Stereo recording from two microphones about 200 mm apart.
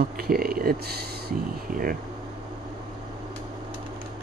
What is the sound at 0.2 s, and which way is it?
Speech, 50° right (ahead or behind).